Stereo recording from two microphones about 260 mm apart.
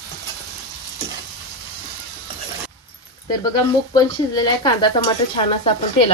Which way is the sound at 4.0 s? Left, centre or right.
Centre.